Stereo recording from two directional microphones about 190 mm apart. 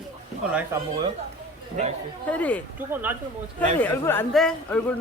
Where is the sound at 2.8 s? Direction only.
10° right (ahead or behind).